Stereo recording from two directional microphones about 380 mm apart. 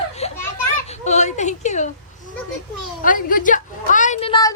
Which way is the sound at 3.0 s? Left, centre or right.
Left.